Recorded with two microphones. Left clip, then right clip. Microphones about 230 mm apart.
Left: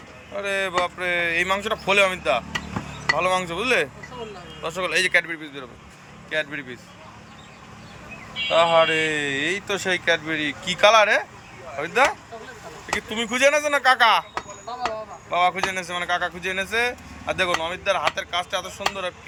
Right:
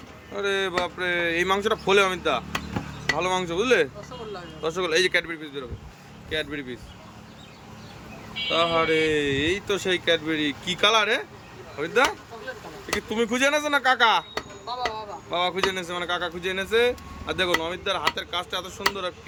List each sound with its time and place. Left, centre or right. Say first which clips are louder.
0.3 s speech: left 2 dB; centre
8.4 s speech: left 5 dB; centre
13.0 s speech: left 3 dB; centre
15.3 s speech: left 4 dB; centre